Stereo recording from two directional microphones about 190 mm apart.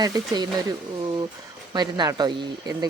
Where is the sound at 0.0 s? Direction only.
20° right (ahead or behind).